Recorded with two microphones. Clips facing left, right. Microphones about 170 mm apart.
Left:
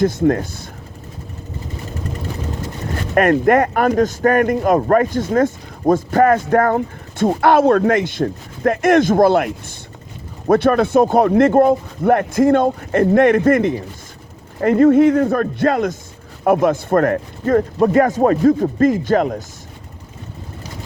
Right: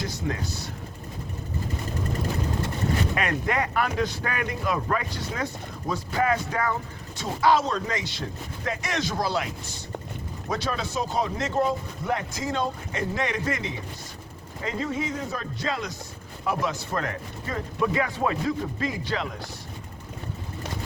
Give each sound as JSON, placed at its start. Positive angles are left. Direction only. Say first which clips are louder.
{"t": 0.0, "sound": "speech", "louder": "left 15 dB", "side_deg": 50}
{"t": 3.2, "sound": "speech", "louder": "left 13 dB", "side_deg": 50}